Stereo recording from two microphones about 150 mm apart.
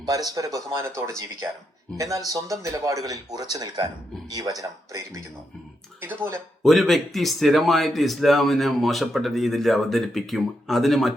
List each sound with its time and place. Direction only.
0.0 s speech: 25° right (ahead or behind)
6.6 s speech: centre (ahead or behind)